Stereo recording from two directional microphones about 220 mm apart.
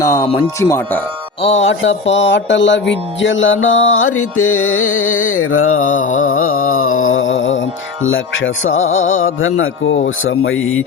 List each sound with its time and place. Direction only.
0.0 s speech: 15° left (ahead or behind)
1.4 s music: 30° left (ahead or behind)
1.6 s music: 60° left (ahead or behind)
5.8 s music: 35° left (ahead or behind)
6.8 s speech: 65° left (ahead or behind)